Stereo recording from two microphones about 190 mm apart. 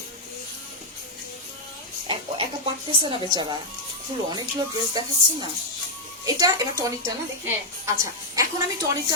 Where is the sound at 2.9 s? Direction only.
25° right (ahead or behind).